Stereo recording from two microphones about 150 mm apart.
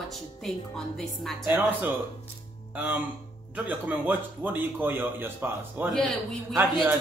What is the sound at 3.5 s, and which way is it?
A man's voice, 10° right (ahead or behind).